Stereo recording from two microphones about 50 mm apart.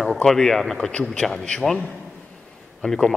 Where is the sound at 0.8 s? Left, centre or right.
Centre.